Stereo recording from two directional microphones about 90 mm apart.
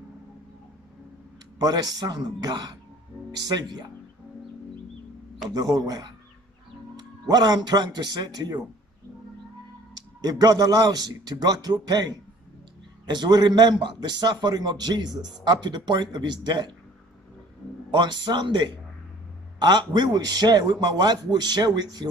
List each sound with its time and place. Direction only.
1.6 s a man's voice: 45° right (ahead or behind)
5.5 s a man's voice: 50° right (ahead or behind)
9.9 s a man's voice: 50° right (ahead or behind)
13.1 s a man's voice: 55° right (ahead or behind)
17.9 s a man's voice: 55° right (ahead or behind)